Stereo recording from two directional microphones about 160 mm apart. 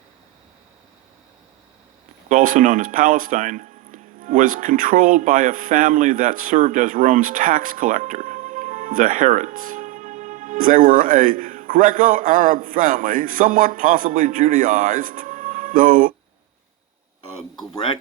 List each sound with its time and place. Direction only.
2.3 s speech: 60° right (ahead or behind)